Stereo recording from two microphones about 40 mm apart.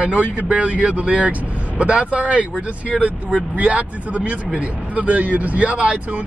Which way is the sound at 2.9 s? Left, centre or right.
Centre.